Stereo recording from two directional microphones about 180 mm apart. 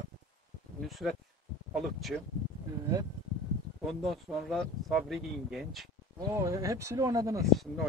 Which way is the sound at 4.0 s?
Centre (ahead or behind).